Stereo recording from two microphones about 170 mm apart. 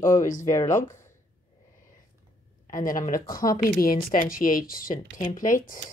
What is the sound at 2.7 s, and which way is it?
Speech, 50° left (ahead or behind).